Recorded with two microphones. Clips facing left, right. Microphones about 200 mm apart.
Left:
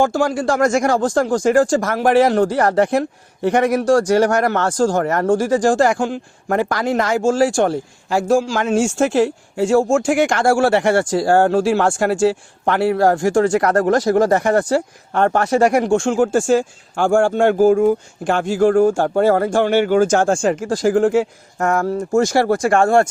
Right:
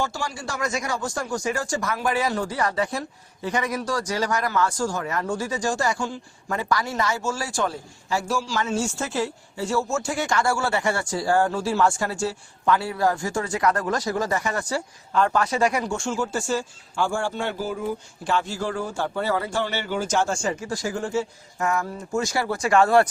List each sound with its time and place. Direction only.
0.0 s speech: 55° left (ahead or behind)
0.9 s speech: 90° left
1.4 s speech: 50° left (ahead or behind)
1.8 s a man's voice: 85° left
5.7 s speech: 55° left (ahead or behind)
10.0 s speech: 90° left; by 15.7 s 65° left (ahead or behind)
16.1 s speech: 50° left (ahead or behind)
20.6 s speech: 90° left
20.9 s speech: 75° left (ahead or behind); by 23.0 s 50° left (ahead or behind)